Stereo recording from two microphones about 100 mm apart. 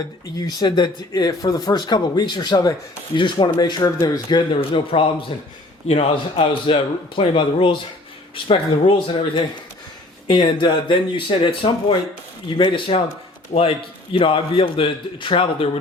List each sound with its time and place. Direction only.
0.3 s speech: 40° left (ahead or behind)
4.7 s a man's voice: 60° left (ahead or behind)
5.9 s a man's voice: 75° left (ahead or behind)
10.2 s a man's voice: 50° left (ahead or behind)